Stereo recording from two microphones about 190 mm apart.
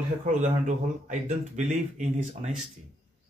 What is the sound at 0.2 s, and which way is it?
Speech, 40° right (ahead or behind).